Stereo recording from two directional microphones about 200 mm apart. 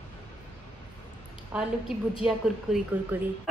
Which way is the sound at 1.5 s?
5° right (ahead or behind).